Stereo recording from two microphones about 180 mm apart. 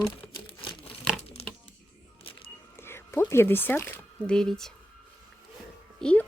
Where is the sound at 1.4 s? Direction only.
35° left (ahead or behind).